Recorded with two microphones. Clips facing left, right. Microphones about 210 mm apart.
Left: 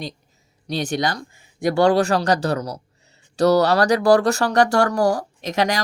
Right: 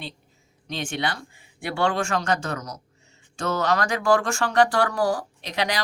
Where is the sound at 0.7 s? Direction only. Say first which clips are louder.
Left 6 dB; 40° left (ahead or behind).